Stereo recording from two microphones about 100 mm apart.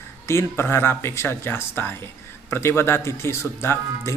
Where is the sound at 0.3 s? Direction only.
25° left (ahead or behind).